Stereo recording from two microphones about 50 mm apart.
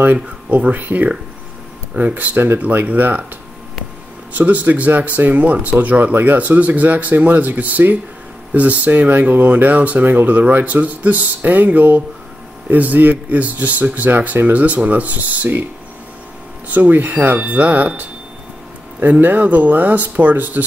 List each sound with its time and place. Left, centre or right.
0.0 s speech: right
4.3 s speech: right
16.6 s speech: right